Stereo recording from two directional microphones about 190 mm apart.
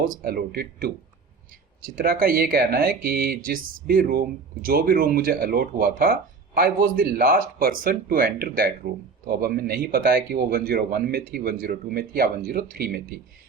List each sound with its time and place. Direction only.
0.0 s speech: 50° right (ahead or behind)